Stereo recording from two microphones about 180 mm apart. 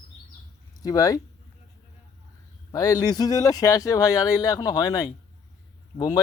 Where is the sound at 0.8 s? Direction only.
20° left (ahead or behind).